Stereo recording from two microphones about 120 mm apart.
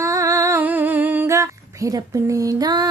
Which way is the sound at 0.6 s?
15° right (ahead or behind).